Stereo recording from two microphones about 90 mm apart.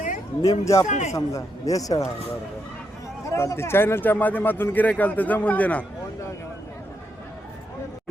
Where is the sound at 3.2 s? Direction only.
30° left (ahead or behind); by 5.8 s 15° left (ahead or behind).